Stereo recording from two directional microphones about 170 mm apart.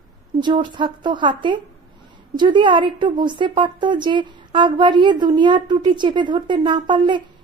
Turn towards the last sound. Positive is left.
turn(degrees=-25)  # may be behind; listen again after turning